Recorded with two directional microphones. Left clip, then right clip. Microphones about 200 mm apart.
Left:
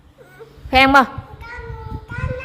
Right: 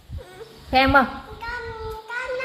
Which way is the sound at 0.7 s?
30° left (ahead or behind).